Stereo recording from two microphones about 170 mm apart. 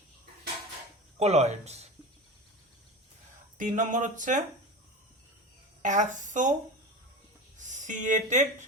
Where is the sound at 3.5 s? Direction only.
50° right (ahead or behind).